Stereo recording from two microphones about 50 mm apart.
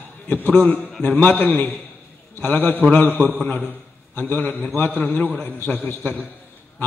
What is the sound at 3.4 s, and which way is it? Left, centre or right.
A man's voice, left.